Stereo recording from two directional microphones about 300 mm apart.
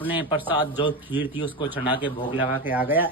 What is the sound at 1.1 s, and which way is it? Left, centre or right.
Speech, centre.